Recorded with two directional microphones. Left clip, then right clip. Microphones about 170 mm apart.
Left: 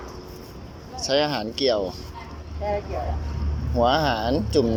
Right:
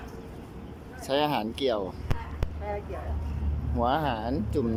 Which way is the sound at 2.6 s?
Centre (ahead or behind).